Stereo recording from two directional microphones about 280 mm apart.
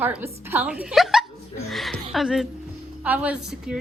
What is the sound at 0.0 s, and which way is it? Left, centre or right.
Speech, centre.